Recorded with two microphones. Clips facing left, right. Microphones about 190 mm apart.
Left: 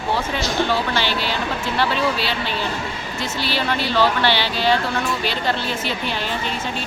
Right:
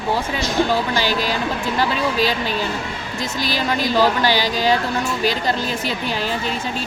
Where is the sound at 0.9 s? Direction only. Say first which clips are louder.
Right 2 dB; 40° right (ahead or behind).